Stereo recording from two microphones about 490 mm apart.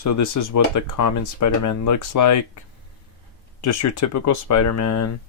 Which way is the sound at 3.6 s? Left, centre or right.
Left.